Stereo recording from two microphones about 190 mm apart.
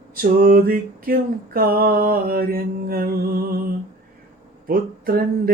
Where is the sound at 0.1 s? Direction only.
50° right (ahead or behind).